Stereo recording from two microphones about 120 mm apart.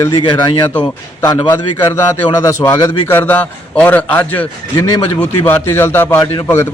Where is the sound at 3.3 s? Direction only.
10° left (ahead or behind).